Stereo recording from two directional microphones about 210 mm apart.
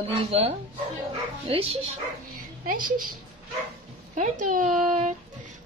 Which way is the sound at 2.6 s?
40° right (ahead or behind).